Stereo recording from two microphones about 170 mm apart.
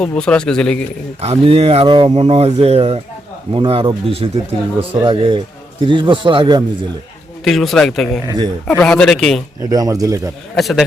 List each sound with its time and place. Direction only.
0.0 s speech: 5° left (ahead or behind)
1.2 s speech: 35° right (ahead or behind)
7.4 s speech: centre (ahead or behind)
9.6 s speech: 20° right (ahead or behind)
10.5 s speech: centre (ahead or behind)